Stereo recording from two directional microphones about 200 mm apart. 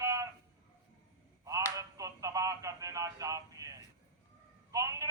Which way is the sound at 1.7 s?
15° right (ahead or behind).